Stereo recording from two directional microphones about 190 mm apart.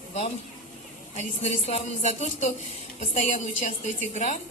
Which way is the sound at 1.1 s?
40° left (ahead or behind).